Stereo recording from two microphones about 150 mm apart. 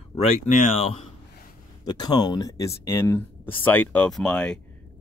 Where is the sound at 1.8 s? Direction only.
25° left (ahead or behind).